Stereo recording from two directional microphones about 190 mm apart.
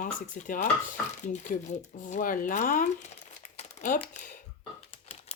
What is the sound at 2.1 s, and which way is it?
Speech, 45° left (ahead or behind).